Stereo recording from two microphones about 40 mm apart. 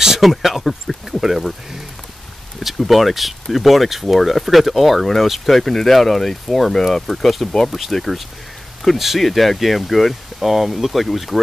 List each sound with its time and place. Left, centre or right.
0.2 s speech: centre